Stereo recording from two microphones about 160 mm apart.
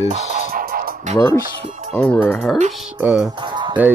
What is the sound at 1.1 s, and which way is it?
Speech, 25° left (ahead or behind).